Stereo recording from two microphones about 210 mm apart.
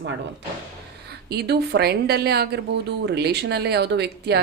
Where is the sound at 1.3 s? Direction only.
50° right (ahead or behind).